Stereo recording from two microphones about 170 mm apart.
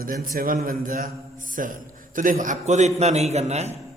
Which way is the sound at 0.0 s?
55° right (ahead or behind).